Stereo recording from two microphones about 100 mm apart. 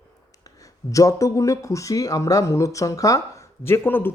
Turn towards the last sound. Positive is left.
turn(degrees=20)  # may be behind; listen again after turning